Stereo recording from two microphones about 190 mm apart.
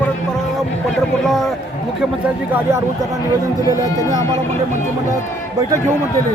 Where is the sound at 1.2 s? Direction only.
Centre (ahead or behind).